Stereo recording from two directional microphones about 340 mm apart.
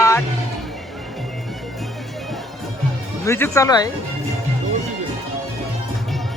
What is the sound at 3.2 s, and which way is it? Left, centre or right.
Speech, centre.